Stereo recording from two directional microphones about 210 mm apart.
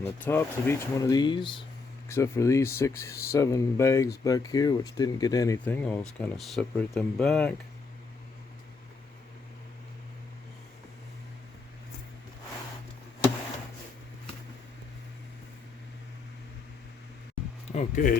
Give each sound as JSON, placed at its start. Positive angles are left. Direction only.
{"t": 0.0, "sound": "speech", "side_deg": 10}
{"t": 2.0, "sound": "speech", "side_deg": 10}
{"t": 17.7, "sound": "speech", "side_deg": 35}